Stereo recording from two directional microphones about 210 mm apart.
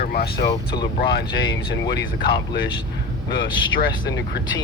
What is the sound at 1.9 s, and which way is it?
Speech, 50° left (ahead or behind).